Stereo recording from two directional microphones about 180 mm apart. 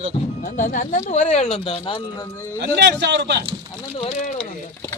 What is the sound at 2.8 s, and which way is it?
Speech, 70° right (ahead or behind).